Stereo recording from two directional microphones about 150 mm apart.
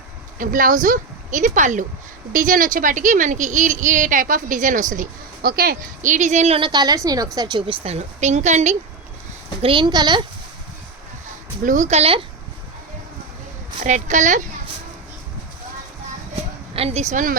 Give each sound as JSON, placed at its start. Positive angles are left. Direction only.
{"t": 0.3, "sound": "speech", "side_deg": -65}
{"t": 6.7, "sound": "a woman's voice", "side_deg": -25}
{"t": 7.9, "sound": "a woman's voice", "side_deg": -45}
{"t": 9.6, "sound": "a woman's voice", "side_deg": -35}
{"t": 11.6, "sound": "a woman's voice", "side_deg": -55}
{"t": 13.7, "sound": "speech", "side_deg": -55}
{"t": 16.3, "sound": "a sound", "side_deg": -40}